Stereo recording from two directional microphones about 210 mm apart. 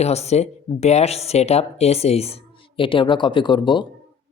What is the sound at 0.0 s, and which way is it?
Speech, 30° left (ahead or behind).